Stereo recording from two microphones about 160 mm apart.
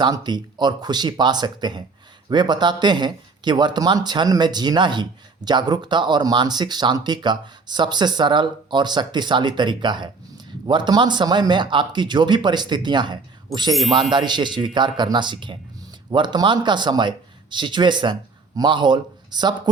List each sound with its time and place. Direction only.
0.0 s speech: 25° right (ahead or behind)